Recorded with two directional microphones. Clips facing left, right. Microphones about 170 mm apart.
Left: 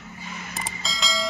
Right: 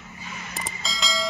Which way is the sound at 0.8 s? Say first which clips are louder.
Even; centre (ahead or behind).